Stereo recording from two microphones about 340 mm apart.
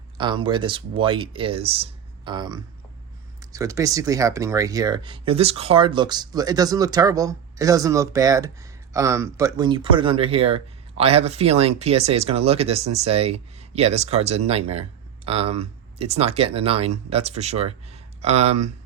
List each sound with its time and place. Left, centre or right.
0.2 s speech: centre